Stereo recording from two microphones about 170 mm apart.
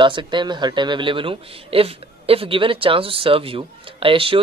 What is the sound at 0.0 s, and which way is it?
Speech, 30° right (ahead or behind).